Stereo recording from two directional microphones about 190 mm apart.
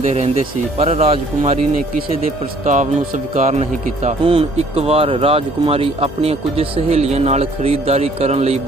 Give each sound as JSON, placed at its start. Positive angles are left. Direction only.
{"t": 0.8, "sound": "a man's voice", "side_deg": -35}
{"t": 2.6, "sound": "a man's voice", "side_deg": -40}